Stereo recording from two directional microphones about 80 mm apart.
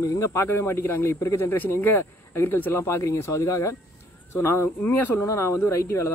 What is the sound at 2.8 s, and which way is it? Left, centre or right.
Speech, left.